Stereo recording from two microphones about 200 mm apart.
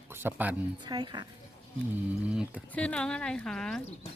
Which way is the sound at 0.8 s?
20° right (ahead or behind).